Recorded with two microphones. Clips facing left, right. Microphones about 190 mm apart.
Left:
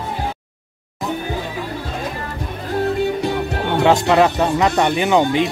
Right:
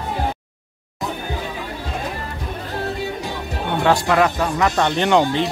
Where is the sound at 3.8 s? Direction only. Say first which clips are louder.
Left 3 dB; 20° left (ahead or behind).